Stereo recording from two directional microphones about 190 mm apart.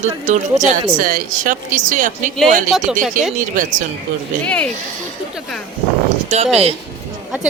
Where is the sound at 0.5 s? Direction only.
20° right (ahead or behind).